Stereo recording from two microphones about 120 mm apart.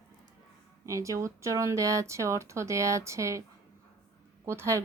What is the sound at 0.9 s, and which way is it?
Speech, 25° right (ahead or behind).